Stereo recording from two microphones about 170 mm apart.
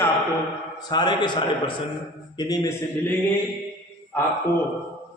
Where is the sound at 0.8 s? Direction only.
25° left (ahead or behind).